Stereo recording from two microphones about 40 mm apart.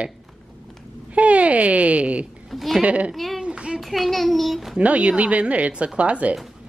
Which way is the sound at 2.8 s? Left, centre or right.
Right.